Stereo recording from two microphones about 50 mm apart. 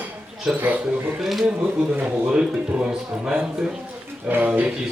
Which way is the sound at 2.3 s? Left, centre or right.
Centre.